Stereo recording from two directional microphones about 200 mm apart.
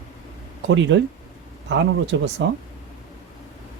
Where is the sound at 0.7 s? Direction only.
65° right (ahead or behind).